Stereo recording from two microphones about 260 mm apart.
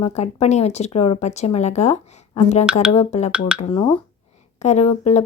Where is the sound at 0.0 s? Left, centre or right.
Left.